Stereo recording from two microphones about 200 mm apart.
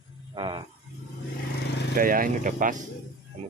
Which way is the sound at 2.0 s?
45° right (ahead or behind).